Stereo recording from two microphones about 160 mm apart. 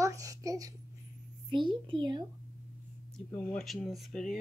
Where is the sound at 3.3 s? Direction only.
10° left (ahead or behind).